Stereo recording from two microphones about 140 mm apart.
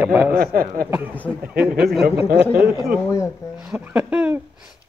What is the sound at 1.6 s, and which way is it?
Speech, centre (ahead or behind).